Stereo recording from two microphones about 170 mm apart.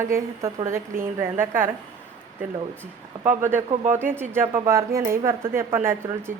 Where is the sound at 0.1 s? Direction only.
15° right (ahead or behind).